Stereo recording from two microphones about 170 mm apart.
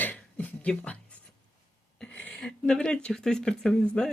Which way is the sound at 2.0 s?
5° left (ahead or behind).